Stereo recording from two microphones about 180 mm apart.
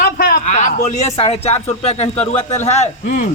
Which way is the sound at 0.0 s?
60° left (ahead or behind).